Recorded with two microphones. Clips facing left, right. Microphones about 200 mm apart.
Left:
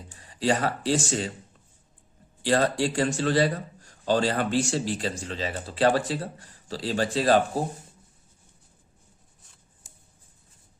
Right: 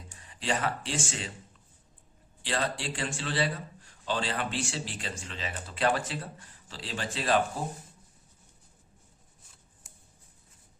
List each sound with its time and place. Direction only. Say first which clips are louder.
0.2 s speech: left 7 dB; 35° left (ahead or behind)
2.4 s a man's voice: left 9 dB; 40° left (ahead or behind)